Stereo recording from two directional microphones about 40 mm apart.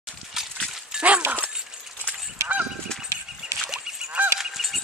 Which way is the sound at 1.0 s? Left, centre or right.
Right.